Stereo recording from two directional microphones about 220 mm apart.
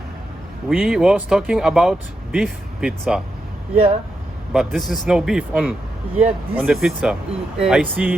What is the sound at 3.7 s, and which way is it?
Speech, 25° right (ahead or behind).